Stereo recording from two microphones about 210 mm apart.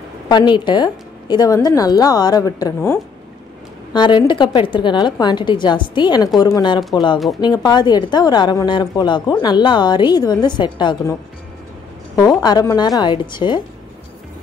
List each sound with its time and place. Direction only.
0.3 s a woman's voice: 20° left (ahead or behind)
12.2 s a woman's voice: 15° left (ahead or behind)